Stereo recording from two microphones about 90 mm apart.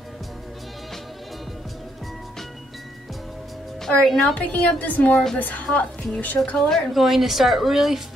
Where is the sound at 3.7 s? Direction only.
5° left (ahead or behind).